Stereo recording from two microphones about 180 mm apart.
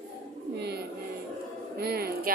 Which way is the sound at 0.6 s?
65° right (ahead or behind).